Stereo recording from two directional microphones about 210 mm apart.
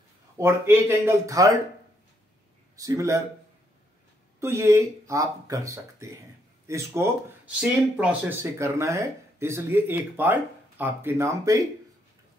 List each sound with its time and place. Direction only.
0.4 s speech: 10° right (ahead or behind)
2.7 s speech: 15° right (ahead or behind)
4.4 s speech: 15° right (ahead or behind)